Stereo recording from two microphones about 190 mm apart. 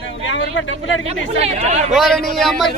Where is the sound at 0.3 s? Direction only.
80° left.